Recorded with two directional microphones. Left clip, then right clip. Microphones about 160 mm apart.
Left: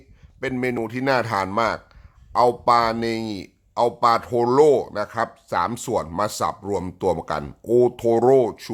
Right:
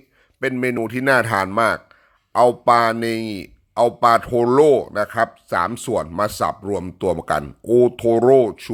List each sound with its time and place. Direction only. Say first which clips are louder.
0.5 s speech: even; 20° right (ahead or behind)